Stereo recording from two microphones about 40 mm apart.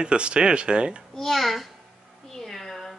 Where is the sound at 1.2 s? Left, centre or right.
Centre.